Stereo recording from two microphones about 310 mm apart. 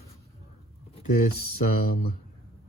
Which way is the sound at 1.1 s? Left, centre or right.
Left.